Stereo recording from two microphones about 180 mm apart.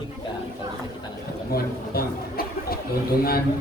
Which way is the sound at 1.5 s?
55° left (ahead or behind).